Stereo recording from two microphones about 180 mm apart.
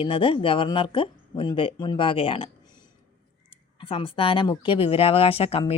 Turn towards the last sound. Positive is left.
turn(degrees=35)  # may be behind; listen again after turning